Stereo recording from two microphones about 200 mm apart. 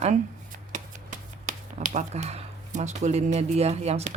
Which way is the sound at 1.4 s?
35° right (ahead or behind).